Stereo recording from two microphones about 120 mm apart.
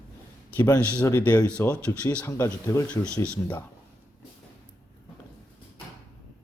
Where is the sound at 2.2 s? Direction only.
25° left (ahead or behind).